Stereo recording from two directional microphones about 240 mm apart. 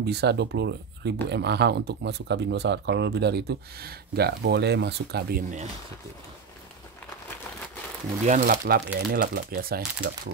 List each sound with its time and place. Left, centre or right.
0.0 s speech: right
8.3 s speech: right